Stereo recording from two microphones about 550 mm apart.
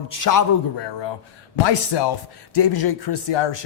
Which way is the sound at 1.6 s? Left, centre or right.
Left.